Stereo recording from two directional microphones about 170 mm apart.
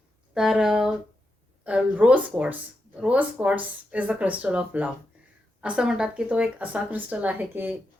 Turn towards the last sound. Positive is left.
turn(degrees=-10)  # may be behind; listen again after turning